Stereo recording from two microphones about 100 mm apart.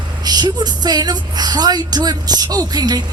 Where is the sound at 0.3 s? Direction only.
45° right (ahead or behind).